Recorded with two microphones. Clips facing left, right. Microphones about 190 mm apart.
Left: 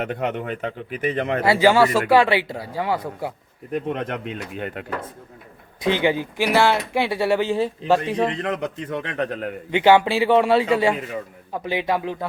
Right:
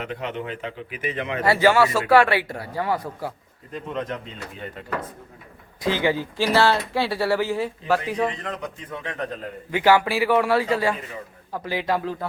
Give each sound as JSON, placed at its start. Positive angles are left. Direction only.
{"t": 0.0, "sound": "a man's voice", "side_deg": 50}
{"t": 1.5, "sound": "speech", "side_deg": 15}
{"t": 3.7, "sound": "a man's voice", "side_deg": 60}
{"t": 5.8, "sound": "speech", "side_deg": 20}
{"t": 8.3, "sound": "a man's voice", "side_deg": 70}
{"t": 9.7, "sound": "speech", "side_deg": 20}